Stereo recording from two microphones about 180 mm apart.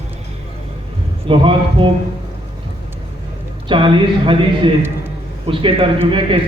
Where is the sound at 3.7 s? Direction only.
30° right (ahead or behind).